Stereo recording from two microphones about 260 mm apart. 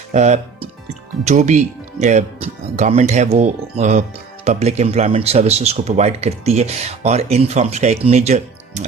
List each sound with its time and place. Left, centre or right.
0.1 s speech: right